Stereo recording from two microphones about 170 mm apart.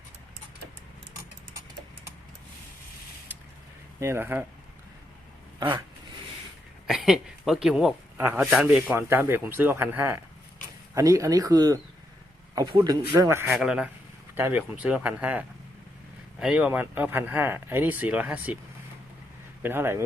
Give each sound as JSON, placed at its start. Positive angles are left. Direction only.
{"t": 4.0, "sound": "speech", "side_deg": -15}
{"t": 6.8, "sound": "speech", "side_deg": -5}
{"t": 19.6, "sound": "speech", "side_deg": -15}